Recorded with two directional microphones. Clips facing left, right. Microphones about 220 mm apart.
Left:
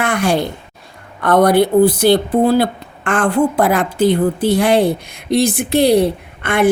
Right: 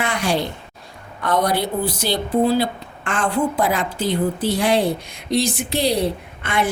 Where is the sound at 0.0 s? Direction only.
55° left (ahead or behind).